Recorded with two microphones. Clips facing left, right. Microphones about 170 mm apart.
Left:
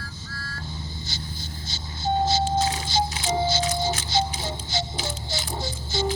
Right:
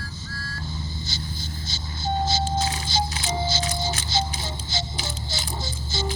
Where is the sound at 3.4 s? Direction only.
55° left (ahead or behind).